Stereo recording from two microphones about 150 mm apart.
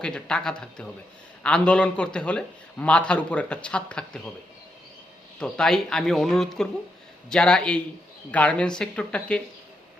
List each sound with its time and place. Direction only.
0.0 s a man's voice: 5° left (ahead or behind)
5.4 s a man's voice: 5° left (ahead or behind)